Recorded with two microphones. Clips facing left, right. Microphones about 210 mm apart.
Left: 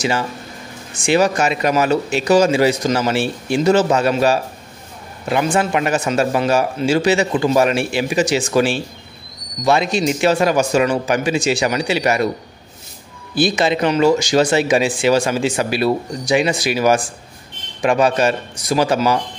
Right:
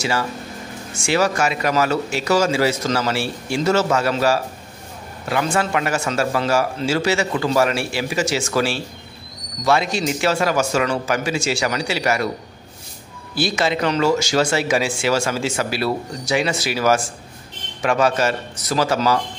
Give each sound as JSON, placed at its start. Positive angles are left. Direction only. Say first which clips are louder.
{"t": 0.9, "sound": "a man's voice", "louder": "left 4 dB", "side_deg": 20}
{"t": 13.3, "sound": "speech", "louder": "left 4 dB", "side_deg": 20}